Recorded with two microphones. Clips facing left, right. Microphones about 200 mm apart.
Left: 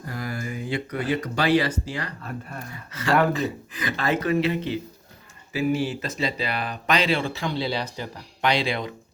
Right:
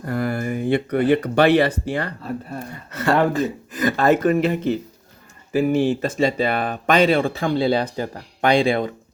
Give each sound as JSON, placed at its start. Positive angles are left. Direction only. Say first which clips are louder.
{"t": 0.0, "sound": "speech", "louder": "right 8 dB", "side_deg": -60}
{"t": 3.3, "sound": "speech", "louder": "right 5 dB", "side_deg": -45}